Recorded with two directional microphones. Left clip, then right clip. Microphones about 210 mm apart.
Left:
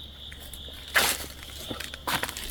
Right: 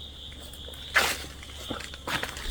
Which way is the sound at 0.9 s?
15° left (ahead or behind).